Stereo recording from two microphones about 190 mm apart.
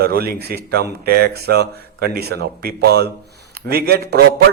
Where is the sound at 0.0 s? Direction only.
55° right (ahead or behind).